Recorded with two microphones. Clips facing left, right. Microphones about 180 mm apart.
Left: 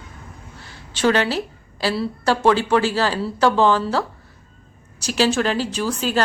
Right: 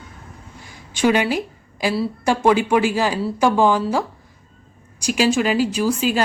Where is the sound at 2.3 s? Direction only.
15° right (ahead or behind).